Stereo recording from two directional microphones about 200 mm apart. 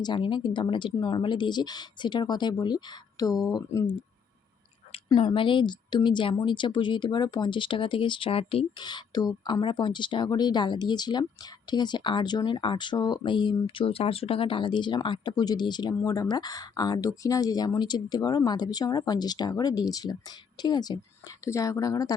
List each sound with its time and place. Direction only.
0.0 s a woman's voice: 25° left (ahead or behind)
4.9 s a woman's voice: 20° left (ahead or behind)